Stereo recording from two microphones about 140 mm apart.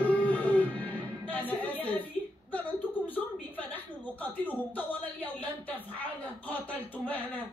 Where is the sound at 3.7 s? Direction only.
10° left (ahead or behind).